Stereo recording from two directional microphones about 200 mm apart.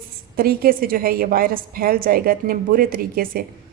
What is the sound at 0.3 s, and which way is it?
Speech, 50° right (ahead or behind).